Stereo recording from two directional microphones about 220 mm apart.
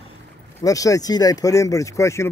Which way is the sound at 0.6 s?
15° left (ahead or behind).